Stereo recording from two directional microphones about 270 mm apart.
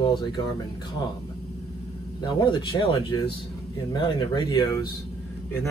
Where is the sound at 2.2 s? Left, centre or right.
Centre.